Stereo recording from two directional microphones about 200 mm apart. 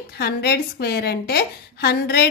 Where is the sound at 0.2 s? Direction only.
55° left (ahead or behind).